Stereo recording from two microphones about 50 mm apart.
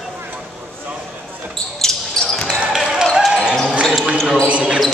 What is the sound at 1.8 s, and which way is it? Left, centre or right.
Basketball bounce, centre.